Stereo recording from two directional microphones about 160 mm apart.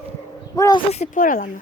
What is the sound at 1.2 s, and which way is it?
Speech, 60° left (ahead or behind).